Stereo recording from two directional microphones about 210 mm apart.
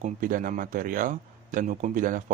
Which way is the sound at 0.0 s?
40° right (ahead or behind).